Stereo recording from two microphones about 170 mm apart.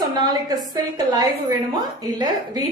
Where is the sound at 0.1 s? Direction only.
25° right (ahead or behind).